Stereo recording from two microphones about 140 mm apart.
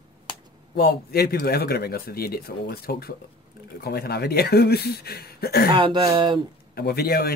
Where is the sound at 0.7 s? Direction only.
90° left.